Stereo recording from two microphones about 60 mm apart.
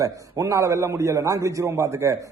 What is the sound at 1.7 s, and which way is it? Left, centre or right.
Speech, right.